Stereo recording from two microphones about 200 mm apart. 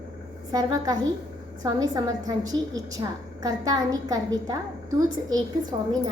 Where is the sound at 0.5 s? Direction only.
20° right (ahead or behind).